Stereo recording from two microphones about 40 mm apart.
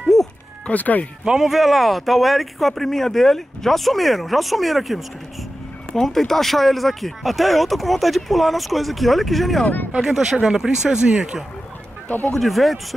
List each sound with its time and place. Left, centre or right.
0.1 s a sound: centre
0.7 s speech: left
1.2 s speech: centre
1.5 s speech: centre
5.9 s speech: centre
10.0 s speech: centre
12.4 s speech: centre